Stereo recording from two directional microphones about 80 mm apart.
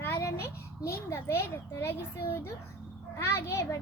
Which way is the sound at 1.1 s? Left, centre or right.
Left.